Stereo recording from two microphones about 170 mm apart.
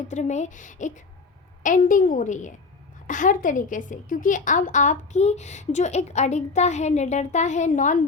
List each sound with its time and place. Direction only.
0.1 s a woman's voice: 45° left (ahead or behind)